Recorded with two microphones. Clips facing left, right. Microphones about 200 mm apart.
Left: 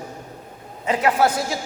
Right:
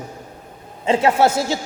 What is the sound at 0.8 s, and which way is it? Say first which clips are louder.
Speech: right 3 dB; 25° right (ahead or behind).